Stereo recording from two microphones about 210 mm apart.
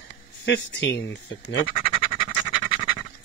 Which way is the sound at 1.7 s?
25° left (ahead or behind).